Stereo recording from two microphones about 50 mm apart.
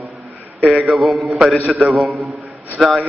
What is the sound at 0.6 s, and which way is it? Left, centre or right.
A man's voice, centre.